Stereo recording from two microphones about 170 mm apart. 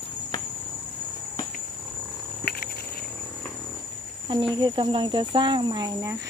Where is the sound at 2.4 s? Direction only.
65° left (ahead or behind).